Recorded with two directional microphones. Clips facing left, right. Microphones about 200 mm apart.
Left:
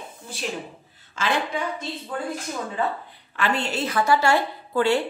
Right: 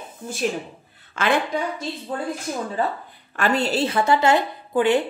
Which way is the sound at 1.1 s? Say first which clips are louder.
Right 4 dB; 60° right (ahead or behind).